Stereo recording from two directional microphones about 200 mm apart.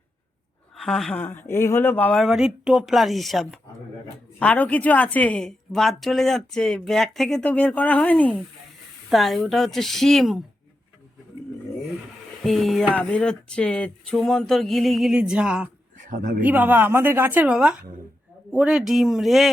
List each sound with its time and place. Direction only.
0.8 s a woman's voice: centre (ahead or behind)
12.4 s a woman's voice: centre (ahead or behind)
16.0 s a sound: 40° right (ahead or behind)
16.4 s a woman's voice: 10° right (ahead or behind)